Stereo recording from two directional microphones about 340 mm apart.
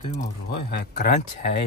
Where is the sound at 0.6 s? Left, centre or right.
Left.